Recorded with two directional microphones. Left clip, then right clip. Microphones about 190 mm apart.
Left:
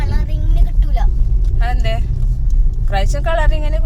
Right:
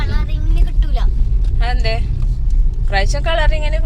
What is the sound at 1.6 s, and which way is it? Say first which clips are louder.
Vehicle: right 1 dB; 5° left (ahead or behind).